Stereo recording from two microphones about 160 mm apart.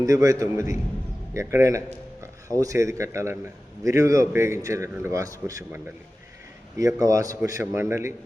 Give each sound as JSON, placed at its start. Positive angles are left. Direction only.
{"t": 0.0, "sound": "a man's voice", "side_deg": -20}